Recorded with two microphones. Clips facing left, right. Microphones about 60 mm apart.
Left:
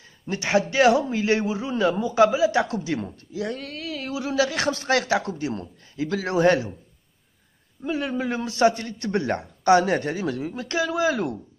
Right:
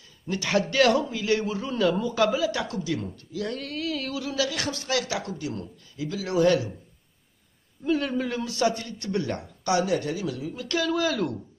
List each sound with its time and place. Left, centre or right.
0.3 s a man's voice: left
1.1 s speech: left
1.4 s a man's voice: centre; by 3.4 s left
3.4 s speech: centre
4.1 s speech: left
6.0 s speech: left
6.3 s speech: left
7.8 s speech: centre
8.3 s speech: left
10.7 s a man's voice: centre